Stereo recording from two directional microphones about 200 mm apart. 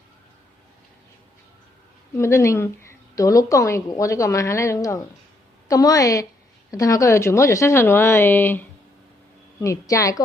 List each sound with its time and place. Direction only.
2.1 s a woman's voice: 15° left (ahead or behind)